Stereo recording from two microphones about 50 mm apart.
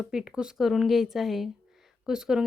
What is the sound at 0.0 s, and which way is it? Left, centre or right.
Speech, centre.